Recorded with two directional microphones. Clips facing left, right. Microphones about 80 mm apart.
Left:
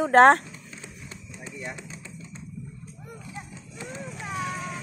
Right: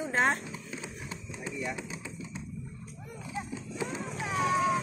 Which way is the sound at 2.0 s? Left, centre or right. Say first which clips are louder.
Right 1 dB; centre.